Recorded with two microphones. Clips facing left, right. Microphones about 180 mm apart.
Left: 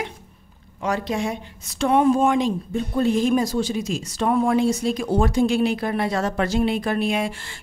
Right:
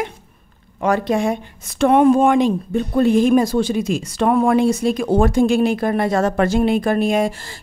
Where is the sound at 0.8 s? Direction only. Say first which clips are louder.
Right 6 dB; 55° right (ahead or behind).